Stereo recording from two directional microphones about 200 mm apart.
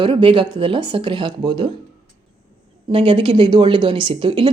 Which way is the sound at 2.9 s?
25° right (ahead or behind).